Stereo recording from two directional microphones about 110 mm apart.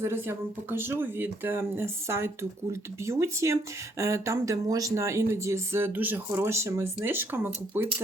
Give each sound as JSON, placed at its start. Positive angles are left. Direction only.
{"t": 0.0, "sound": "speech", "side_deg": -20}